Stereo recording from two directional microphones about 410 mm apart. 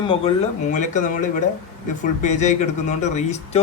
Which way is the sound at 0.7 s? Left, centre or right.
Centre.